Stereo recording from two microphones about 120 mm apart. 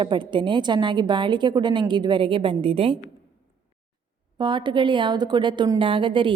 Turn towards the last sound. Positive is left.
turn(degrees=-45)  # may be behind; listen again after turning